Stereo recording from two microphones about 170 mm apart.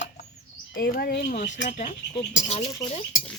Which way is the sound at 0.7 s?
65° left (ahead or behind).